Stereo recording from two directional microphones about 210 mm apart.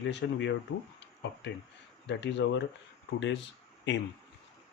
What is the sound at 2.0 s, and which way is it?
Speech, 55° left (ahead or behind).